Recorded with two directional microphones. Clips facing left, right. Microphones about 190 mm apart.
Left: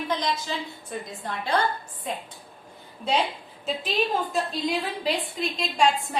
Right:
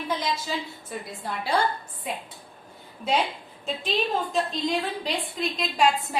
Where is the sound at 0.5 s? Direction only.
5° right (ahead or behind).